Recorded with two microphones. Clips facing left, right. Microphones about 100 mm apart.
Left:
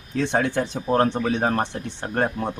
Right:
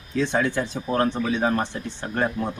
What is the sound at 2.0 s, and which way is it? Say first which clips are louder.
Speech: left 1 dB; 45° left (ahead or behind).